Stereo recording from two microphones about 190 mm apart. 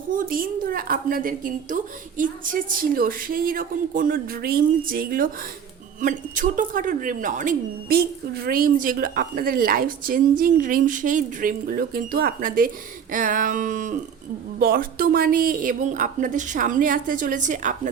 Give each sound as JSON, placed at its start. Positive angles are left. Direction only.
{"t": 0.1, "sound": "speech", "side_deg": -45}